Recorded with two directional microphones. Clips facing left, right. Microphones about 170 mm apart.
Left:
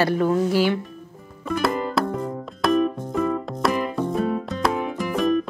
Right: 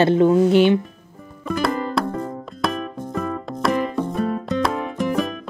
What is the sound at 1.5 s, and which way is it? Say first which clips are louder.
Music: right 1 dB; centre (ahead or behind).